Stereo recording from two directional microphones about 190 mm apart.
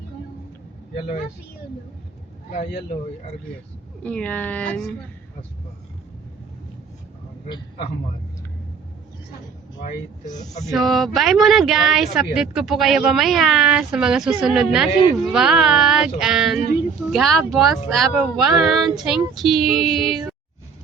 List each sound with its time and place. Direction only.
4.0 s speech: 5° left (ahead or behind)
7.4 s a man's voice: 25° left (ahead or behind)
10.2 s speech: 20° left (ahead or behind)
10.7 s speech: centre (ahead or behind)